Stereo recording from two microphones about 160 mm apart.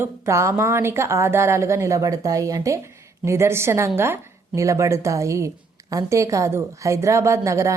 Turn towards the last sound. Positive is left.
turn(degrees=-20)  # may be behind; listen again after turning